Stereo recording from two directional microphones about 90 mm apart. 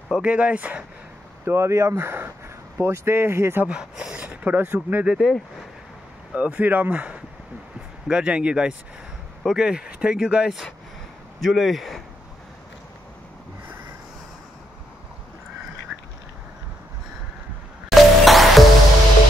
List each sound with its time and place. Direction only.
0.1 s speech: 10° right (ahead or behind)
1.4 s speech: 30° right (ahead or behind)
3.6 s speech: 10° right (ahead or behind)
5.1 s speech: centre (ahead or behind)
6.3 s speech: 15° right (ahead or behind)
17.8 s music: centre (ahead or behind)